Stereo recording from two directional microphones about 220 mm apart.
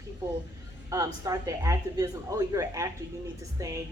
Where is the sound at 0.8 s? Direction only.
15° right (ahead or behind).